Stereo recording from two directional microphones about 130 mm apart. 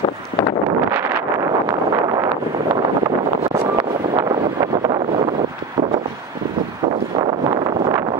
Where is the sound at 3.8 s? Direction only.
45° right (ahead or behind).